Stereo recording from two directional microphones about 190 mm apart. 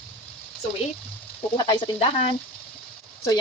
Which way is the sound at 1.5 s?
20° left (ahead or behind).